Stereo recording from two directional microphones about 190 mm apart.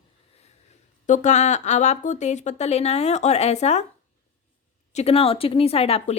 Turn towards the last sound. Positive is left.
turn(degrees=35)  # may be behind; listen again after turning